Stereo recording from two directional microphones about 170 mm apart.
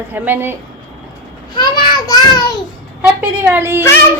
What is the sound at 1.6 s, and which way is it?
Child singing, 25° left (ahead or behind).